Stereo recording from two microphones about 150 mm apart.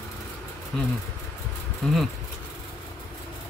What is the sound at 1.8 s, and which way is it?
Speech, 5° left (ahead or behind).